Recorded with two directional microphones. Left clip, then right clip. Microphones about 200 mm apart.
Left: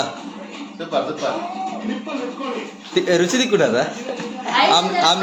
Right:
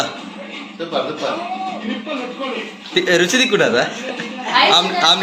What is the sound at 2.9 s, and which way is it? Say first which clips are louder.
A man's voice: right 3 dB; 10° left (ahead or behind).